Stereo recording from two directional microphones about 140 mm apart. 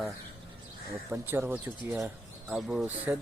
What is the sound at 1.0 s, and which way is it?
Speech, 15° right (ahead or behind).